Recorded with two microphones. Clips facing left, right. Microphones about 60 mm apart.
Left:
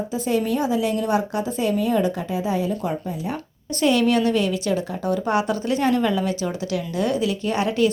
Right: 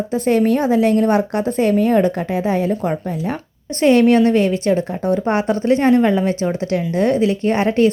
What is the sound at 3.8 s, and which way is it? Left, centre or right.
A woman's voice, right.